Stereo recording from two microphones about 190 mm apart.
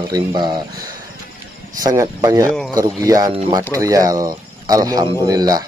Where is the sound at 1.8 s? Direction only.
20° right (ahead or behind).